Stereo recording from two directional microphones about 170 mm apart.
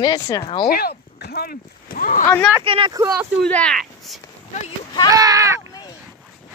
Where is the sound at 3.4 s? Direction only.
5° left (ahead or behind).